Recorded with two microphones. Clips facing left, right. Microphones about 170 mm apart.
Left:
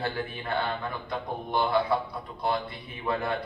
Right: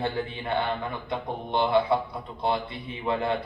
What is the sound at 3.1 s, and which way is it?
Speech, 25° right (ahead or behind).